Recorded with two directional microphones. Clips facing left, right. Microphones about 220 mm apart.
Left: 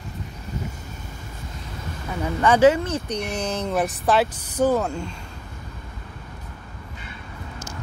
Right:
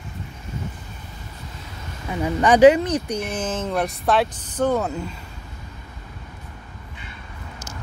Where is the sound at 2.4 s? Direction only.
15° right (ahead or behind).